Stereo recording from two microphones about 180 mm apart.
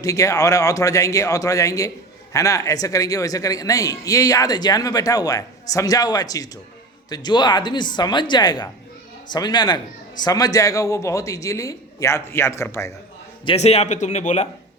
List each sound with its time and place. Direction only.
0.0 s a man's voice: 20° left (ahead or behind)
13.4 s a man's voice: 30° left (ahead or behind)